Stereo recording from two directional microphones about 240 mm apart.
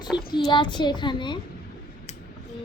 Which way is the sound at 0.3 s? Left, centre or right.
Centre.